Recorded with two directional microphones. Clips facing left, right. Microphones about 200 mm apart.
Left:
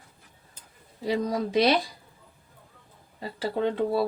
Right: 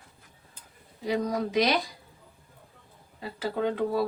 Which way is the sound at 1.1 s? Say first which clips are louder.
Left 1 dB; 30° left (ahead or behind).